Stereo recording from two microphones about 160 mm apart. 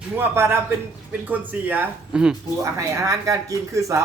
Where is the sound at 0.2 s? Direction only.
15° right (ahead or behind).